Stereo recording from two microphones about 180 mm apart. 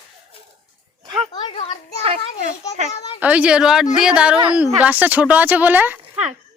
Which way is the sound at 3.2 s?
10° right (ahead or behind).